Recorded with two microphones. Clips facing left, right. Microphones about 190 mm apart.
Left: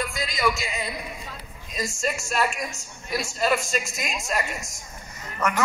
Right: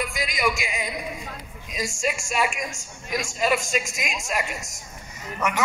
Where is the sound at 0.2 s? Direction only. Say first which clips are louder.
Left 1 dB; 15° right (ahead or behind).